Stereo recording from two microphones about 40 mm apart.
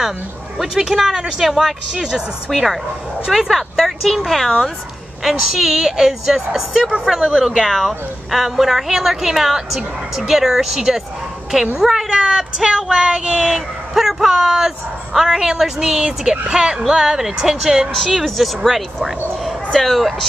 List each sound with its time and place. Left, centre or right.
0.6 s speech: centre
2.0 s speech: centre
7.4 s speech: centre
12.8 s speech: centre